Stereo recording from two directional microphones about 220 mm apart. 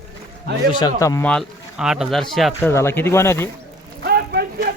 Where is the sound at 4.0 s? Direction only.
45° right (ahead or behind).